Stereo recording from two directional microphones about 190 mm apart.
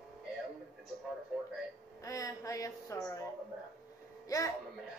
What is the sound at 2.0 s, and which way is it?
Speech, 15° left (ahead or behind).